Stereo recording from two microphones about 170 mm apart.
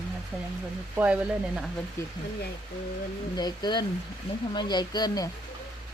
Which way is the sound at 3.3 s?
25° left (ahead or behind).